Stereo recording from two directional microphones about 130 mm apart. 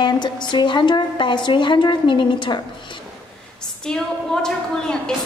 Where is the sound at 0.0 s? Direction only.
35° left (ahead or behind).